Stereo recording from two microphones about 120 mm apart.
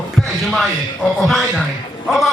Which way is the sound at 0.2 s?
Centre (ahead or behind).